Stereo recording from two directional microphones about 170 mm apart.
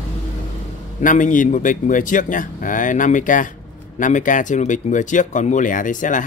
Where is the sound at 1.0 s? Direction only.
50° left (ahead or behind).